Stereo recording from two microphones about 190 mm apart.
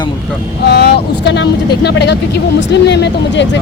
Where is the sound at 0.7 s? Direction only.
60° left (ahead or behind).